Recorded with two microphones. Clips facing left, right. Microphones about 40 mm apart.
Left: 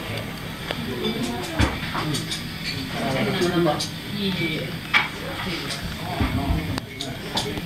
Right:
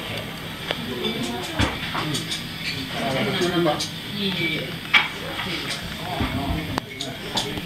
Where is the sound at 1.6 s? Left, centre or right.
Centre.